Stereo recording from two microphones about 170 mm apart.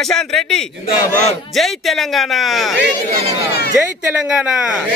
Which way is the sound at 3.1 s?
65° left (ahead or behind).